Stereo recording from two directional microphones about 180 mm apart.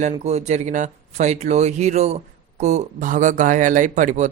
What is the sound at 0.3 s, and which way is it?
Speech, 35° right (ahead or behind).